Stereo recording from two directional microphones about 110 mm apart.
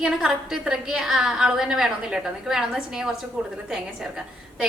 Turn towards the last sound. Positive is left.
turn(degrees=-5)  # may be behind; listen again after turning